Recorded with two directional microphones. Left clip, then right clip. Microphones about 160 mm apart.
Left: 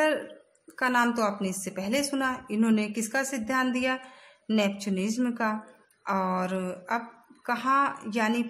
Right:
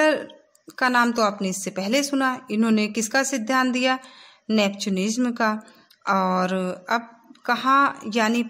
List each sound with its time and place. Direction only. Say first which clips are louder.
0.7 s a woman's voice: right 5 dB; 20° right (ahead or behind)